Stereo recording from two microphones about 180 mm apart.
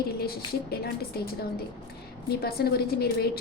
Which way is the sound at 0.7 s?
60° left (ahead or behind).